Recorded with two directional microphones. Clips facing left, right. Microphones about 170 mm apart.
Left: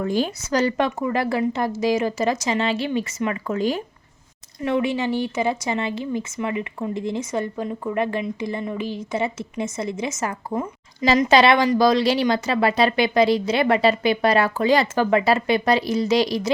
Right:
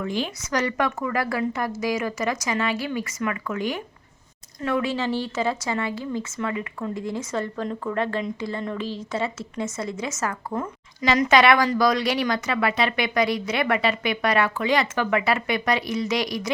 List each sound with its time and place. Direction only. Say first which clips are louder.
0.0 s speech: left 5 dB; 40° left (ahead or behind)
4.6 s speech: left 3 dB; 20° left (ahead or behind)
11.0 s speech: left 2 dB; 30° left (ahead or behind)